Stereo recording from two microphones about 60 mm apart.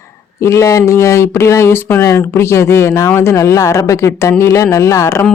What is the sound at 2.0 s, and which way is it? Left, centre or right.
Speech, left.